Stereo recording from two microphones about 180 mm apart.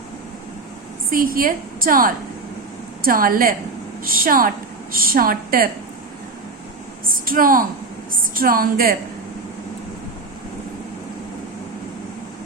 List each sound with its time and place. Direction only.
1.1 s a woman's voice: 50° right (ahead or behind)
7.1 s a sound: 50° right (ahead or behind)
8.1 s a woman's voice: 55° right (ahead or behind)